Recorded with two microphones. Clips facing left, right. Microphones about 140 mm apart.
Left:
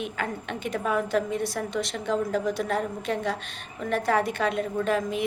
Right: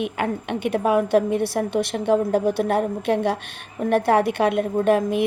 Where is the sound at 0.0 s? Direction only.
60° right (ahead or behind).